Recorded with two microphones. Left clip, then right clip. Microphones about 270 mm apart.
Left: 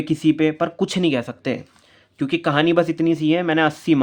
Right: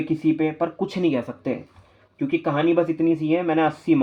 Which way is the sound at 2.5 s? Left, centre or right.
Left.